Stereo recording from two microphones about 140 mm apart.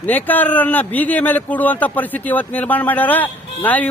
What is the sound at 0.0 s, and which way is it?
Speech, 10° left (ahead or behind).